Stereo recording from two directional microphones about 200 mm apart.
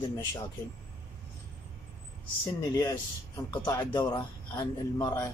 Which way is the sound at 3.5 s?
20° left (ahead or behind).